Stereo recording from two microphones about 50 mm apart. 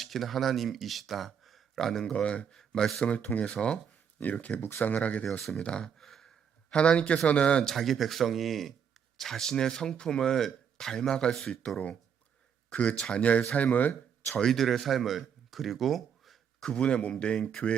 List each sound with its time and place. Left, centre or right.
0.0 s speech: centre
2.2 s speech: left
2.5 s speech: centre
3.0 s speech: left
4.2 s speech: left
5.5 s speech: centre
5.8 s sigh: centre
6.7 s speech: left
7.7 s speech: centre
12.7 s speech: left
13.0 s speech: centre
13.5 s speech: left
14.3 s speech: centre
16.6 s speech: centre